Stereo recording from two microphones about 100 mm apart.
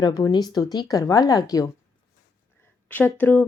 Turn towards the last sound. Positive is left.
turn(degrees=15)  # may be behind; listen again after turning